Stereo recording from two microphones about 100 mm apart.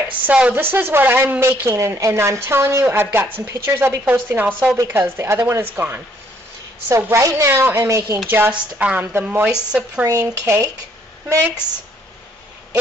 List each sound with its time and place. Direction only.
0.1 s a woman's voice: 15° right (ahead or behind)
1.8 s a woman's voice: 30° right (ahead or behind)
8.3 s speech: 20° right (ahead or behind)
10.0 s a woman's voice: 25° right (ahead or behind)